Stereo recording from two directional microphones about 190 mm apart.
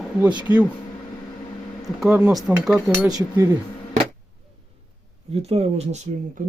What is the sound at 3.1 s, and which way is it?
Speech, 15° right (ahead or behind).